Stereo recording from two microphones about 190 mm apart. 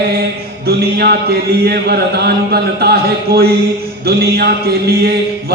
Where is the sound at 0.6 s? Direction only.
55° right (ahead or behind).